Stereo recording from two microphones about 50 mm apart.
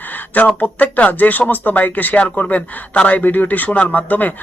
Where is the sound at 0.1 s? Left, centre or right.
Left.